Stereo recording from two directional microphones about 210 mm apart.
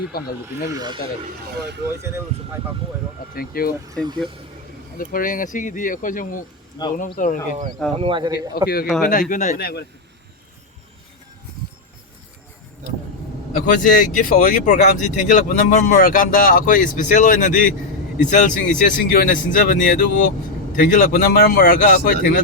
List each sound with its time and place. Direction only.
0.1 s speech: 45° left (ahead or behind)
0.7 s speech: 20° right (ahead or behind)
1.5 s speech: 55° right (ahead or behind)
2.0 s speech: 15° right (ahead or behind)
3.3 s speech: 45° left (ahead or behind)
3.8 s speech: 20° right (ahead or behind)
4.9 s speech: 40° left (ahead or behind)
7.9 s speech: 25° right (ahead or behind)
9.0 s speech: 40° left (ahead or behind)
13.5 s speech: 40° left (ahead or behind)